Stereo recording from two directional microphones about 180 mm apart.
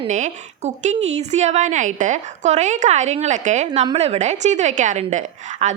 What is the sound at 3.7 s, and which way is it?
A woman's voice, 30° right (ahead or behind).